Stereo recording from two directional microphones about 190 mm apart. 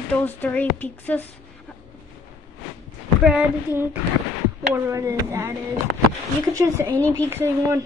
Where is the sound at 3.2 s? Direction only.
10° right (ahead or behind).